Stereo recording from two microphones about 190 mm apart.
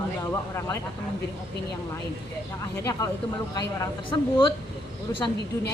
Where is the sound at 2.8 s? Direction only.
15° left (ahead or behind).